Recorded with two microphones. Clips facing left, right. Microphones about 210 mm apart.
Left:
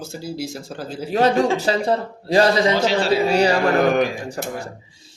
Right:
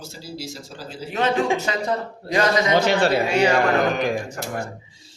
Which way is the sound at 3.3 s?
35° left (ahead or behind).